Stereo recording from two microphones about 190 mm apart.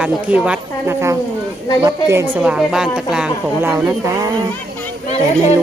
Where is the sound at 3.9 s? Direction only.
15° right (ahead or behind).